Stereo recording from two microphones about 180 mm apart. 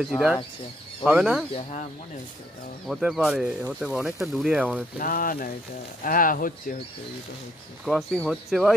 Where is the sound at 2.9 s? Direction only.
Centre (ahead or behind).